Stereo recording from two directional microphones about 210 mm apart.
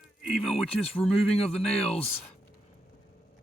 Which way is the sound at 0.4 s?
5° left (ahead or behind).